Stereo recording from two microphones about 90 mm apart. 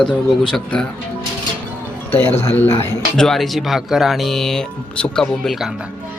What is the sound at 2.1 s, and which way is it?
Speech, 20° left (ahead or behind).